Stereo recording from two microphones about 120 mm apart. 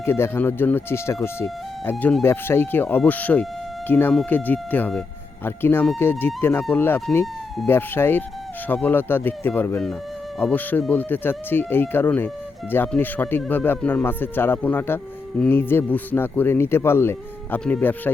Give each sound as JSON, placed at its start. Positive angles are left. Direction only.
{"t": 0.0, "sound": "speech", "side_deg": 20}